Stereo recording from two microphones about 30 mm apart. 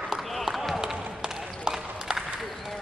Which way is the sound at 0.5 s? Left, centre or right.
Centre.